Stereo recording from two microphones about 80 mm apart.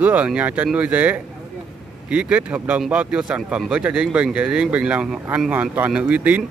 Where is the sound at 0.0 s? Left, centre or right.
Centre.